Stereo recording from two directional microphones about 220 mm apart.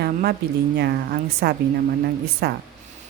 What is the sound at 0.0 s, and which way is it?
A woman's voice, 45° right (ahead or behind).